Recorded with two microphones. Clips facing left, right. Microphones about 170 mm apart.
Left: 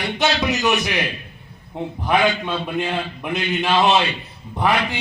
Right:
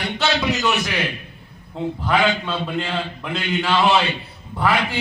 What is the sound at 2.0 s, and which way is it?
A man's voice, 15° left (ahead or behind).